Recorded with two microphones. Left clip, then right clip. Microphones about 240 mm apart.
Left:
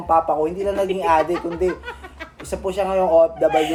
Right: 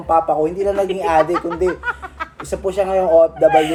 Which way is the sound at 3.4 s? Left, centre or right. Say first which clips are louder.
Right 5 dB; centre.